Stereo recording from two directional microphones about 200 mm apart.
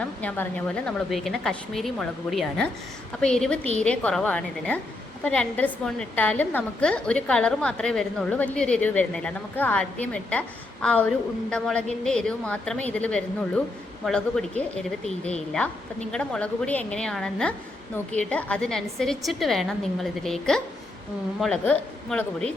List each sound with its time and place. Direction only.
0.0 s a woman's voice: 5° left (ahead or behind)